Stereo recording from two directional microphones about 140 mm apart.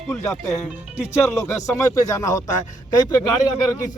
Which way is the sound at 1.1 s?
20° left (ahead or behind).